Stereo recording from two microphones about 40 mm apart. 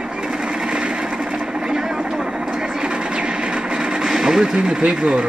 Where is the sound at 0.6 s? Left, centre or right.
Right.